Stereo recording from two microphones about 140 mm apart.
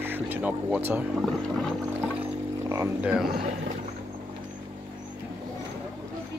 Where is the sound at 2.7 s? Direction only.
20° right (ahead or behind).